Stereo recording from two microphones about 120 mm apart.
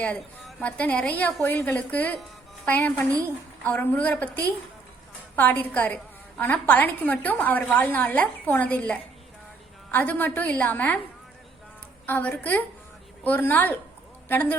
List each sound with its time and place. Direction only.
0.6 s a woman's voice: 10° left (ahead or behind)
12.0 s a woman's voice: 15° left (ahead or behind)